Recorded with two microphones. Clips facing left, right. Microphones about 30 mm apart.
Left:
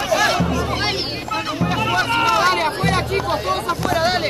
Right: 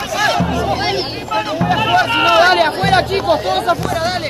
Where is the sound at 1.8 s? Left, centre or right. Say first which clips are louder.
Right 4 dB; right.